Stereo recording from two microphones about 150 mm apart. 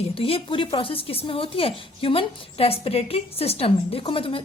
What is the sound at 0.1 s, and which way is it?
Speech, 40° left (ahead or behind).